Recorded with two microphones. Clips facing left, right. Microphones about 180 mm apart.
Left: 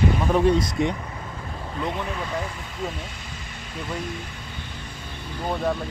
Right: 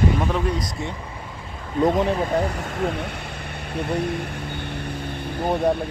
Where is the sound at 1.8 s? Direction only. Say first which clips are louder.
Right 10 dB; 40° right (ahead or behind).